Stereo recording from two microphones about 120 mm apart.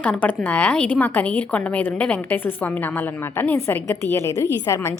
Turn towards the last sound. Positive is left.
turn(degrees=25)  # may be behind; listen again after turning